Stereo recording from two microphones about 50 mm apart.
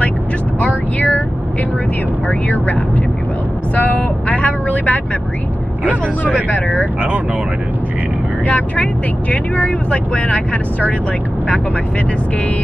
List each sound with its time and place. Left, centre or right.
0.6 s vehicle: left
2.2 s speech: left
6.3 s speech: left
8.5 s speech: left